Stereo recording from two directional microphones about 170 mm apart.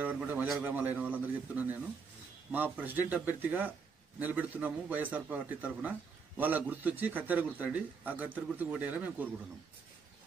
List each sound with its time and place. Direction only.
0.0 s a man's voice: 10° right (ahead or behind)